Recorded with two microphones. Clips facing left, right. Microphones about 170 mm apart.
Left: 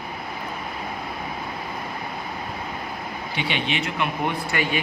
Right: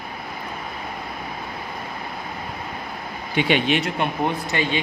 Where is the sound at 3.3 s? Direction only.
50° right (ahead or behind); by 4.8 s 25° right (ahead or behind).